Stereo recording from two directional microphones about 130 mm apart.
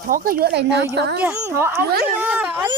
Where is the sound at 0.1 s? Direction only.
90° right.